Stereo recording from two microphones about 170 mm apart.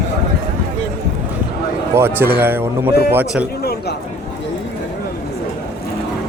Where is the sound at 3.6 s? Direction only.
70° left (ahead or behind).